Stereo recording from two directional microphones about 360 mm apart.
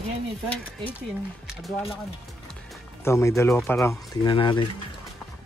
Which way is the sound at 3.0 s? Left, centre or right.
Centre.